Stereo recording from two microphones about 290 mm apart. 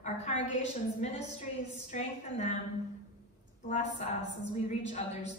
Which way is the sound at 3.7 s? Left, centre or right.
Left.